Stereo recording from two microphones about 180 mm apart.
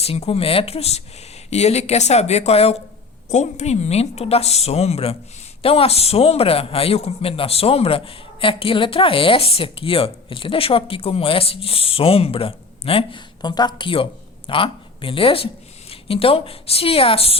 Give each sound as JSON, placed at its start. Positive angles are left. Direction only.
{"t": 0.0, "sound": "a man's voice", "side_deg": 35}